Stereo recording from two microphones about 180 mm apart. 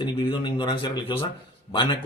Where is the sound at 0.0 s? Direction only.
30° left (ahead or behind).